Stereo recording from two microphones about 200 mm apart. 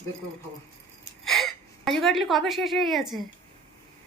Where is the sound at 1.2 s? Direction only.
Centre (ahead or behind).